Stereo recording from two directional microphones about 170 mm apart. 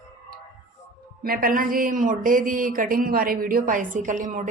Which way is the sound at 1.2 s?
55° right (ahead or behind).